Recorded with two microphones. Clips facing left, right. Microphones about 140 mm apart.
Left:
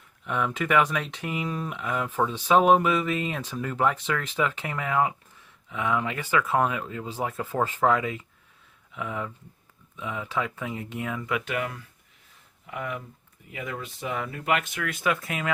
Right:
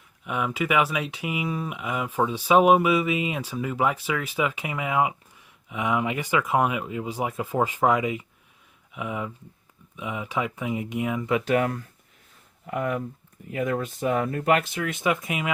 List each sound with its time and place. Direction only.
0.3 s speech: 10° right (ahead or behind)
11.3 s speech: 35° right (ahead or behind); by 15.5 s 15° right (ahead or behind)